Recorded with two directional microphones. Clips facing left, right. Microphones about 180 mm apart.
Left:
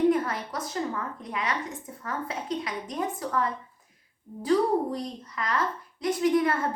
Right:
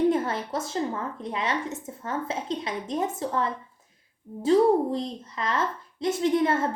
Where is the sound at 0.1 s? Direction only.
25° right (ahead or behind).